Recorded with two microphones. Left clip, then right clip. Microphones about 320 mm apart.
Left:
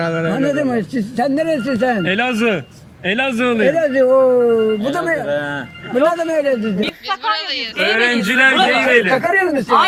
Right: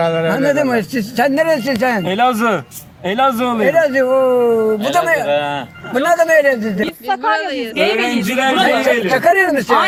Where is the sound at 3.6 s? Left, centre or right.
Right.